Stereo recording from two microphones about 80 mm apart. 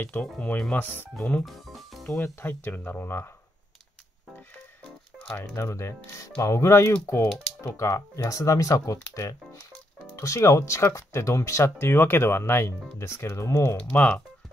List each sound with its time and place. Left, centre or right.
0.0 s speech: centre
0.7 s speech: left
1.1 s speech: centre
1.4 s speech: centre
2.0 s speech: left
5.5 s speech: left
13.7 s speech: centre